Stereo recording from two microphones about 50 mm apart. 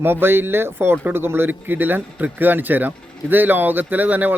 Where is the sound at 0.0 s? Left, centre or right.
Right.